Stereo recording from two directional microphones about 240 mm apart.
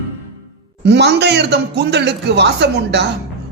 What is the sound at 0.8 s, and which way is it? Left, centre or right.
Speech, right.